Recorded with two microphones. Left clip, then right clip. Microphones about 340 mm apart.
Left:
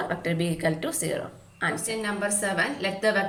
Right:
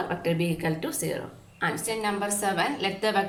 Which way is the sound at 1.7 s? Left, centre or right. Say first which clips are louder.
Right 1 dB; centre.